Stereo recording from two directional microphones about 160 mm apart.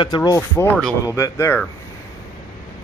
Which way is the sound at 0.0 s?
25° left (ahead or behind).